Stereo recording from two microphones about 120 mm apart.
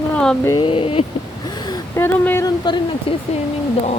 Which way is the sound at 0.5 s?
45° left (ahead or behind).